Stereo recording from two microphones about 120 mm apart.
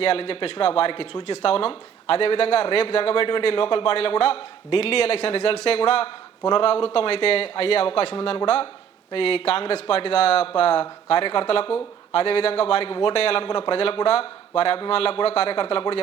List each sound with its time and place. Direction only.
0.0 s a man's voice: 55° left (ahead or behind)